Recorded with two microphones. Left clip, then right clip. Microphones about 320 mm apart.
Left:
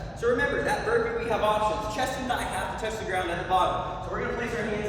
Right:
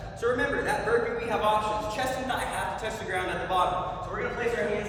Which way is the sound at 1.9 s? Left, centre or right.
Centre.